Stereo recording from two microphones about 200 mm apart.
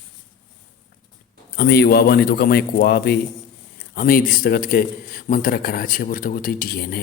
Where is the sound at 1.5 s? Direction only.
55° left (ahead or behind).